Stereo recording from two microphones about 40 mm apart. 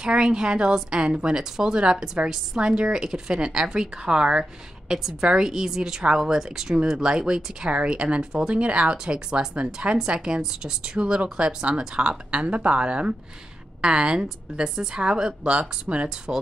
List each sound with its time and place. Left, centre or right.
0.0 s a woman's voice: right
12.4 s a woman's voice: right